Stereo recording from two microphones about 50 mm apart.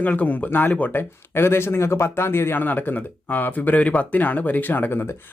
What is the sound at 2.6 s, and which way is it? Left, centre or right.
Speech, left.